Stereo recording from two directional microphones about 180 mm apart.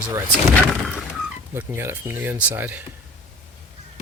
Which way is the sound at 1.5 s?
15° right (ahead or behind).